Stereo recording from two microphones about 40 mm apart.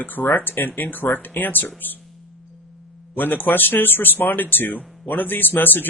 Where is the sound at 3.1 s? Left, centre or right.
Left.